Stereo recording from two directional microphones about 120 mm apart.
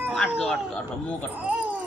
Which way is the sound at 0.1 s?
5° left (ahead or behind).